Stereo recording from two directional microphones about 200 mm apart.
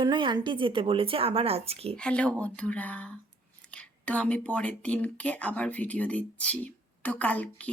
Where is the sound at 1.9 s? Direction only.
5° left (ahead or behind).